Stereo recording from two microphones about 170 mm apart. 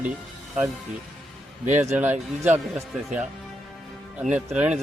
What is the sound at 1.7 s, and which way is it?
Speech, 45° right (ahead or behind).